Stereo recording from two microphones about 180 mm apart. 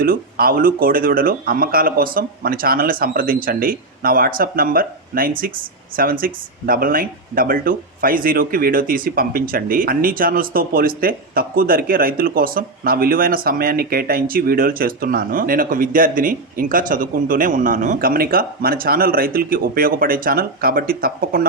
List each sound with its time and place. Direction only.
0.0 s speech: 55° right (ahead or behind)